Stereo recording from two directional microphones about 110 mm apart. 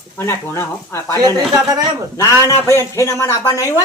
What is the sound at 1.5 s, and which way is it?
Speech, 35° right (ahead or behind).